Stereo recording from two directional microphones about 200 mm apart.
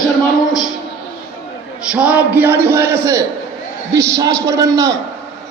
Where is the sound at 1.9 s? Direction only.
5° right (ahead or behind).